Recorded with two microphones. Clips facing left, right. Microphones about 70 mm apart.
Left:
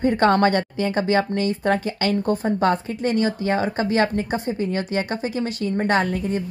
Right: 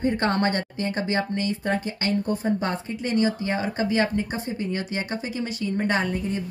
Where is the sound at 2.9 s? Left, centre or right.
Left.